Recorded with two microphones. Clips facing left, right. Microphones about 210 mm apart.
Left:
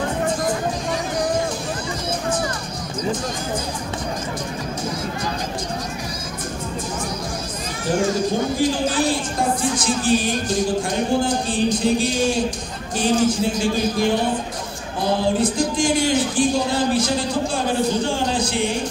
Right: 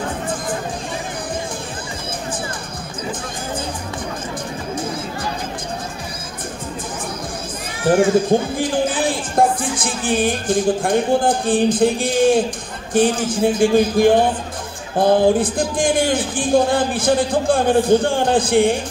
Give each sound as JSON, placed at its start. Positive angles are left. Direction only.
{"t": 7.8, "sound": "a man's voice", "side_deg": -55}